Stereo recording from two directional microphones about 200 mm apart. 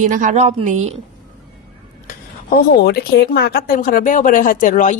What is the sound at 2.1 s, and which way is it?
A woman's voice, 50° left (ahead or behind).